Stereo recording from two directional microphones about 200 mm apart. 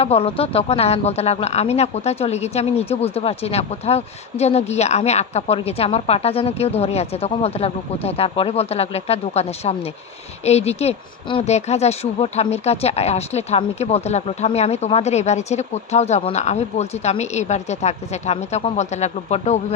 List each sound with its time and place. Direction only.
0.0 s speech: 30° left (ahead or behind)